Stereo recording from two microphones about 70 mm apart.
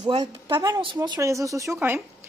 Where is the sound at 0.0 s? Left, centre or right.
Right.